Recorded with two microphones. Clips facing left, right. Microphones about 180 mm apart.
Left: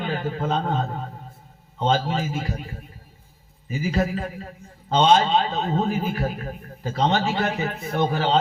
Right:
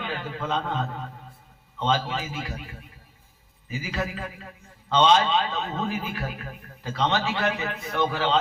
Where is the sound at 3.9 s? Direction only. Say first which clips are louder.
Left 6 dB; 40° left (ahead or behind).